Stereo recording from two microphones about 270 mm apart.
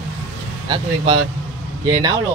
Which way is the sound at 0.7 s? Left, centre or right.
Centre.